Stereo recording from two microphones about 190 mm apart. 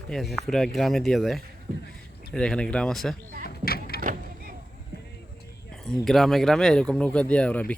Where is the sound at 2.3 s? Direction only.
5° left (ahead or behind).